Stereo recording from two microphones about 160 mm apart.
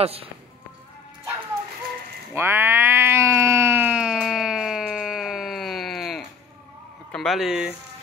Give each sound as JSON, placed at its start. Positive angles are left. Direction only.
{"t": 0.0, "sound": "speech", "side_deg": -40}
{"t": 2.3, "sound": "cat", "side_deg": -15}
{"t": 7.1, "sound": "speech", "side_deg": 0}